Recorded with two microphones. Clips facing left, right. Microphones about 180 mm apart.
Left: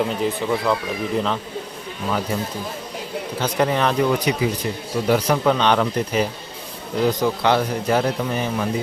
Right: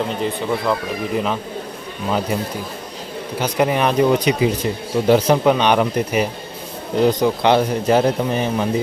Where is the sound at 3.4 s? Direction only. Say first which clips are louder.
Right 2 dB; 15° right (ahead or behind).